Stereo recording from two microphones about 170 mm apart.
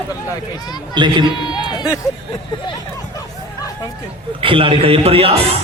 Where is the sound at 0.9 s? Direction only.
25° right (ahead or behind).